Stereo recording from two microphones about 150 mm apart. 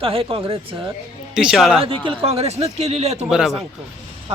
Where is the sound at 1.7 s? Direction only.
40° right (ahead or behind).